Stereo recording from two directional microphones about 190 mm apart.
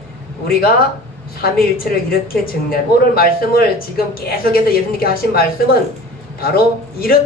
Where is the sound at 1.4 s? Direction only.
50° left (ahead or behind).